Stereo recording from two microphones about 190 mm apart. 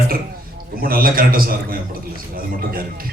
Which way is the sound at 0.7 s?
50° right (ahead or behind).